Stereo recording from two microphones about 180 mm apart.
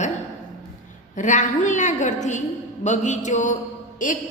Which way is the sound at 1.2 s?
45° left (ahead or behind).